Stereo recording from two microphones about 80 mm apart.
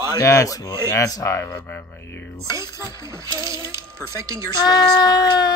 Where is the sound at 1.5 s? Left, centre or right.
Left.